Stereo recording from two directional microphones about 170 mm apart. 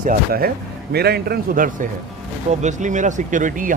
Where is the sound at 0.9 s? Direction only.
70° right (ahead or behind).